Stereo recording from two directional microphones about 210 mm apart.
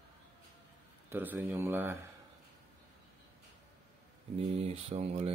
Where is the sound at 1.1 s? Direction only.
10° right (ahead or behind).